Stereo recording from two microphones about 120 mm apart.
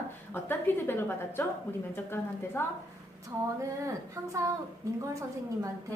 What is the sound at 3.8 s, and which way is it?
Speech, 25° right (ahead or behind).